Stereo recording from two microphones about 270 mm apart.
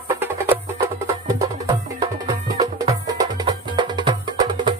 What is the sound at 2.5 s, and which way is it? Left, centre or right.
Music, centre.